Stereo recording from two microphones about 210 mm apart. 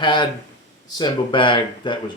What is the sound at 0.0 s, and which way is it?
Speech, 20° left (ahead or behind).